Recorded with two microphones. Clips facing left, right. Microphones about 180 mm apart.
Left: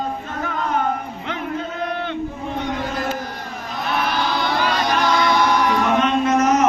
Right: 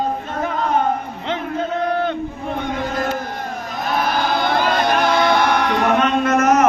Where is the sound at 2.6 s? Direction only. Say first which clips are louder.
Right 2 dB; 50° right (ahead or behind).